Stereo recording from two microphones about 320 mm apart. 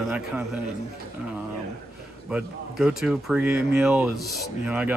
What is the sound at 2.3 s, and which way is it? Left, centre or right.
Speech, centre.